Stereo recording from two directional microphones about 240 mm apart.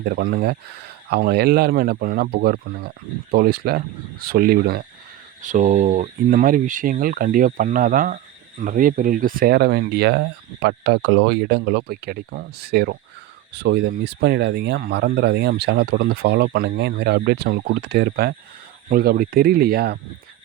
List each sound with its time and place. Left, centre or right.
0.0 s speech: right